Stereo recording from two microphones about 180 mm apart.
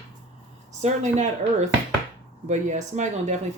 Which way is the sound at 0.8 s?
40° right (ahead or behind).